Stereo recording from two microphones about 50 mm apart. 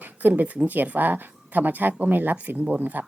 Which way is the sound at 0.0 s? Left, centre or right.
Right.